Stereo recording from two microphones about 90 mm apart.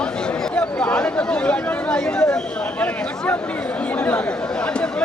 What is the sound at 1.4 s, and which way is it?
Chatter, 15° left (ahead or behind).